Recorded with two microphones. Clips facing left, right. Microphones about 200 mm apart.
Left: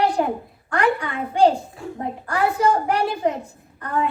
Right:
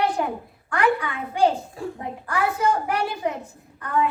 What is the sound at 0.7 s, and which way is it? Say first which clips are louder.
A woman's voice: left 1 dB; 35° left (ahead or behind).